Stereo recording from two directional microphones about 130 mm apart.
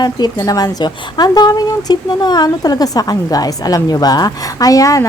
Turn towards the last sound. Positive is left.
turn(degrees=25)  # may be behind; listen again after turning